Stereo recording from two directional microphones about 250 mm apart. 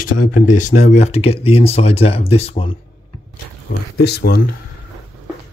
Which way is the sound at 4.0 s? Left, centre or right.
Left.